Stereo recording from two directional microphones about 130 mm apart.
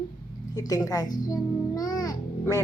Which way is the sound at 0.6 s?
30° left (ahead or behind).